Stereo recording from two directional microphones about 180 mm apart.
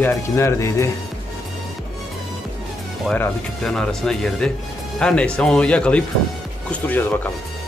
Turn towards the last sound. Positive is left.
turn(degrees=10)  # may be behind; listen again after turning